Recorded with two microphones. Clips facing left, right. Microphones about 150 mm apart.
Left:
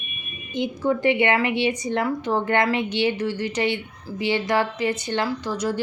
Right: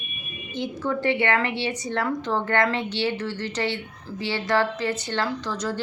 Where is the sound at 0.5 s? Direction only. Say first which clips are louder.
Left 4 dB; 15° left (ahead or behind).